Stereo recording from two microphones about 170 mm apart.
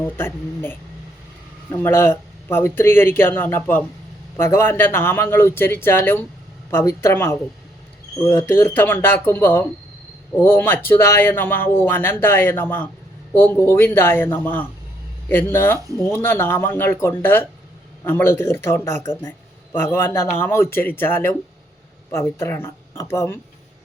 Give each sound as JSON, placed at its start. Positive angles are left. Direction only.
{"t": 0.0, "sound": "speech", "side_deg": 15}